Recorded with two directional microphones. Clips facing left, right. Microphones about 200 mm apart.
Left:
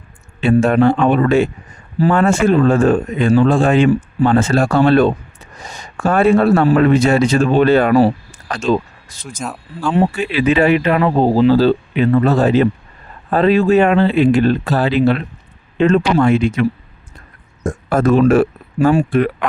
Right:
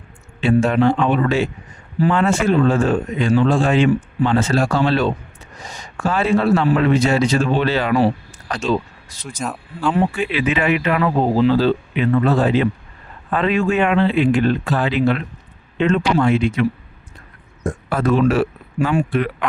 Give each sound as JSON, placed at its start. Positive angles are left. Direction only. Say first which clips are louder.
{"t": 0.4, "sound": "a man's voice", "louder": "left 3 dB", "side_deg": 55}
{"t": 15.8, "sound": "speech", "louder": "left 4 dB", "side_deg": 45}